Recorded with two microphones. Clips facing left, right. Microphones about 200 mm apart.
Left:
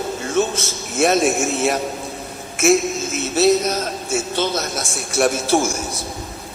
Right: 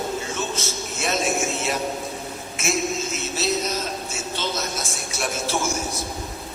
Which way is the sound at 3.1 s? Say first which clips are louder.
Left 9 dB; 60° left (ahead or behind).